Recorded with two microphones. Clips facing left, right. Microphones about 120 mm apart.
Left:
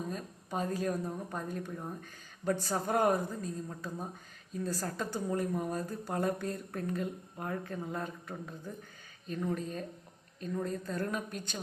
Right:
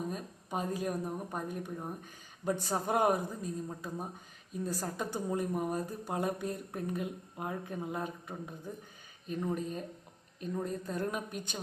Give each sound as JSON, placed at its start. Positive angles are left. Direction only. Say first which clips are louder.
{"t": 0.1, "sound": "a woman's voice", "louder": "even", "side_deg": -15}